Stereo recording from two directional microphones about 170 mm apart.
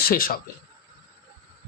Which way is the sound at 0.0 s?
55° left (ahead or behind).